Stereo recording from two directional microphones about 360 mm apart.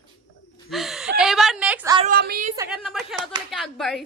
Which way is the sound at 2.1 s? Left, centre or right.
Right.